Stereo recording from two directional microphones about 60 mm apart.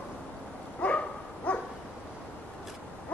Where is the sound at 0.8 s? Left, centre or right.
Left.